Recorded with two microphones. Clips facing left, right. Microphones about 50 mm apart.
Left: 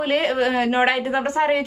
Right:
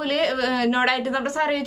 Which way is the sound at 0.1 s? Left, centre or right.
Left.